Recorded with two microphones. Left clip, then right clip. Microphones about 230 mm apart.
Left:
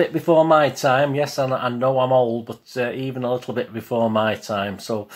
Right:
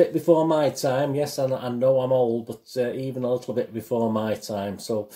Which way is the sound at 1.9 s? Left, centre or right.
Left.